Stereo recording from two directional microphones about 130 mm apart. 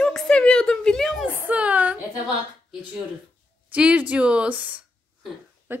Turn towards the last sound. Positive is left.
turn(degrees=-15)  # may be behind; listen again after turning